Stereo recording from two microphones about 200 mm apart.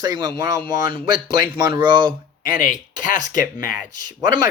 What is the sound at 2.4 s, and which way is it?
Speech, 45° left (ahead or behind).